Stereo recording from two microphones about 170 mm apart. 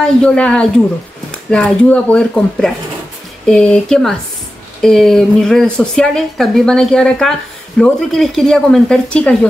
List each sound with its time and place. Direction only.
0.0 s a woman's voice: 5° left (ahead or behind)